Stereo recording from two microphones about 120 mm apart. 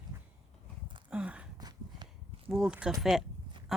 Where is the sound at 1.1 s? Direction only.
10° right (ahead or behind).